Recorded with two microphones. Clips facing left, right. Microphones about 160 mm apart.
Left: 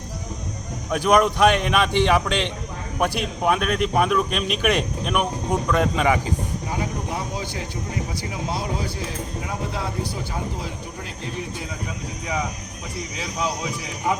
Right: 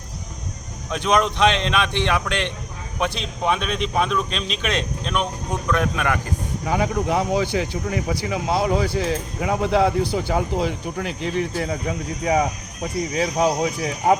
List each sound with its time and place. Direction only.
0.9 s speech: 10° left (ahead or behind)
6.2 s speech: 85° right
13.1 s speech: 50° right (ahead or behind)